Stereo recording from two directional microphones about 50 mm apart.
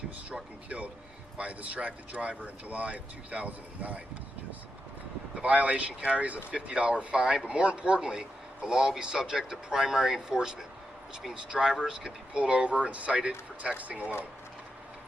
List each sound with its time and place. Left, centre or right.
1.4 s speech: right
5.3 s a man's voice: right; by 11.9 s centre
11.9 s speech: right